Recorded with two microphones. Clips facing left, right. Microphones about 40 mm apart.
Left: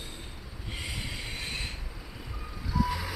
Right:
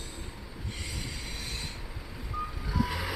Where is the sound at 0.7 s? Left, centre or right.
Left.